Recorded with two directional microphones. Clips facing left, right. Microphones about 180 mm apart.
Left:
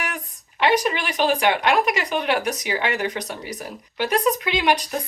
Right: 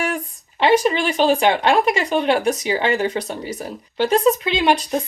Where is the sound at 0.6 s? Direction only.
30° right (ahead or behind).